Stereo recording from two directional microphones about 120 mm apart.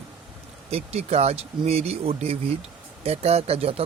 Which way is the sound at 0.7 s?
60° right (ahead or behind).